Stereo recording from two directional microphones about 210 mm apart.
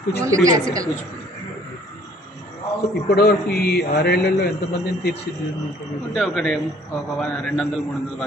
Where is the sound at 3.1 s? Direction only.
45° left (ahead or behind).